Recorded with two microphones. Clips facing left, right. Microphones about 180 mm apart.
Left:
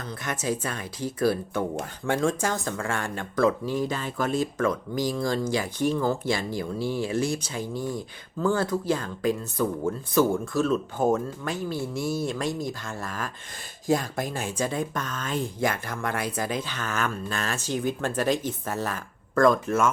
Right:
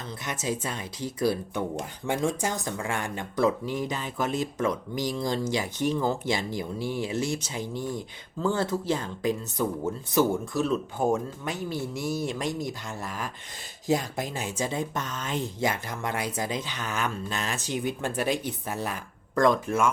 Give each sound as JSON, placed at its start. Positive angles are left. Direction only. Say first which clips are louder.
{"t": 0.0, "sound": "speech", "louder": "left 2 dB", "side_deg": -20}
{"t": 14.3, "sound": "speech", "louder": "left 2 dB", "side_deg": -20}